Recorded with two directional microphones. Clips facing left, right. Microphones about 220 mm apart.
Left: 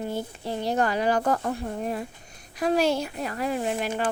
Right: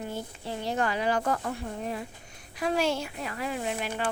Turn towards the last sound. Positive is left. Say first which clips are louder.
# left 5 dB
turn(degrees=45)  # may be behind; listen again after turning